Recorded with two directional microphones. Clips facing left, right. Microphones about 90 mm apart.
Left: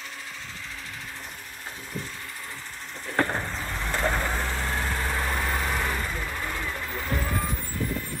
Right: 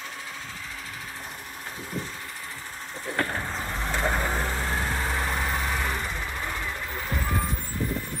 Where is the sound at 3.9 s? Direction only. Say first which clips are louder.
Even; 5° right (ahead or behind).